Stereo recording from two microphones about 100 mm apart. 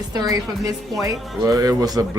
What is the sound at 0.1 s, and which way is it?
A man's voice, 40° right (ahead or behind).